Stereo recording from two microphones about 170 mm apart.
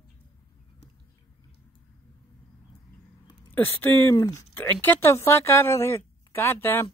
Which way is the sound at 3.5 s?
10° left (ahead or behind).